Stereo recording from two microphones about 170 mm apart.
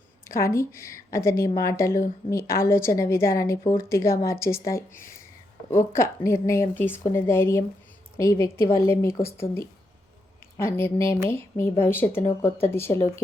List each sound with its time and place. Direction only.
0.3 s a woman's voice: 15° left (ahead or behind)
4.9 s speech: 55° left (ahead or behind)
5.8 s a woman's voice: 15° left (ahead or behind)